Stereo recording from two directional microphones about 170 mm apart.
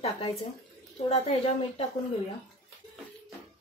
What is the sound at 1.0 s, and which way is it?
Speech, 35° left (ahead or behind).